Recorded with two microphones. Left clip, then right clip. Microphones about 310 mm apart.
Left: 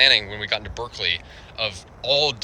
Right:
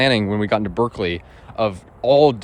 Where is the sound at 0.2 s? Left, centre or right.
Centre.